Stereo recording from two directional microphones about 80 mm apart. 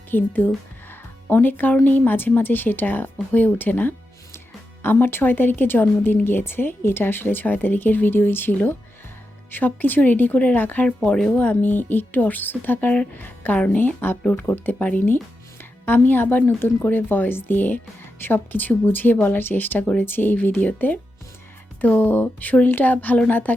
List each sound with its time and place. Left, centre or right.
0.1 s speech: left